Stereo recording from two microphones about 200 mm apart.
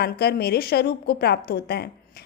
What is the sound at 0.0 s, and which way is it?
A woman's voice, 55° left (ahead or behind).